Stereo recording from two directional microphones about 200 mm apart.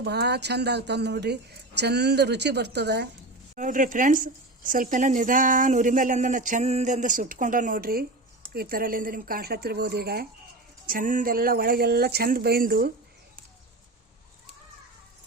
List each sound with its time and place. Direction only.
0.0 s speech: 55° right (ahead or behind)
3.5 s speech: 40° right (ahead or behind)